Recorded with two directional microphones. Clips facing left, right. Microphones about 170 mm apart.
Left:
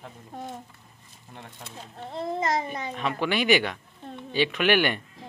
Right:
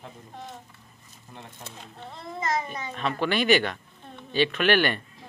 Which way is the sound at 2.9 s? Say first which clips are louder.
Right 1 dB; 10° left (ahead or behind).